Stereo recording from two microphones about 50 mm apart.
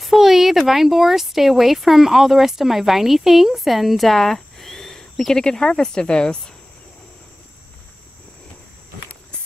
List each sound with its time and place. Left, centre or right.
0.0 s speech: centre